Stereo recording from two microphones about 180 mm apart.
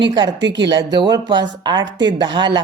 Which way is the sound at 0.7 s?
25° right (ahead or behind).